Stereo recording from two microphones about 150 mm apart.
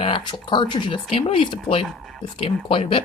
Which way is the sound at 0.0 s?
35° left (ahead or behind).